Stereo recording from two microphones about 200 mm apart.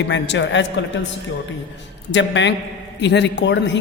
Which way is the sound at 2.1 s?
65° left (ahead or behind).